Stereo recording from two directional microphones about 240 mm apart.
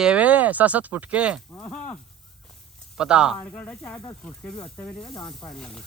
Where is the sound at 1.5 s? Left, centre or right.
Centre.